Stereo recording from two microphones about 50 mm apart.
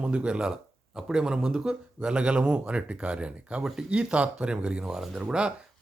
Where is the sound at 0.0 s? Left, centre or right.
Right.